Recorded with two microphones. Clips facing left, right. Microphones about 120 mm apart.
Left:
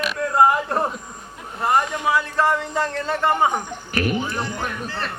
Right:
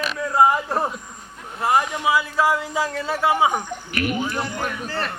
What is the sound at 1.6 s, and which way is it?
Speech, 5° right (ahead or behind).